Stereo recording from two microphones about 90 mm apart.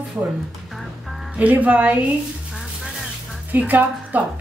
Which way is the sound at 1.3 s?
15° right (ahead or behind).